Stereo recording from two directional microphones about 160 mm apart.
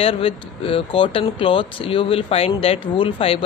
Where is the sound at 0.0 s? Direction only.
35° left (ahead or behind).